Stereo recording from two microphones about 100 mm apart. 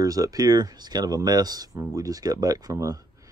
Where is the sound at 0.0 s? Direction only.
35° right (ahead or behind).